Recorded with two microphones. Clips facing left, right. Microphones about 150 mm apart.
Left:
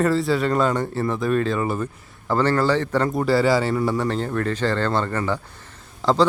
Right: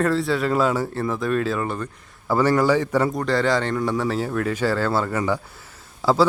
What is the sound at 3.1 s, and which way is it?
A man's voice, 5° left (ahead or behind).